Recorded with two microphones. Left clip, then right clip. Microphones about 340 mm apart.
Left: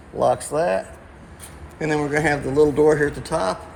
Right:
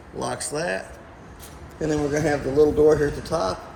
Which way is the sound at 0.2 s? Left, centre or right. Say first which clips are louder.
Left 8 dB; centre.